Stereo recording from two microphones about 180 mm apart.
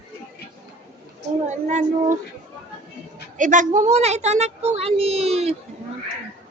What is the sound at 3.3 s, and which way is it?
A child's voice, 45° right (ahead or behind).